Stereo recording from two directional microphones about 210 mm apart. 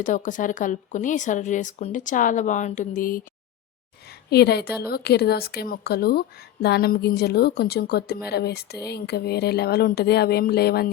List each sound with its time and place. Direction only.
0.0 s speech: 40° left (ahead or behind)
4.3 s speech: 50° left (ahead or behind)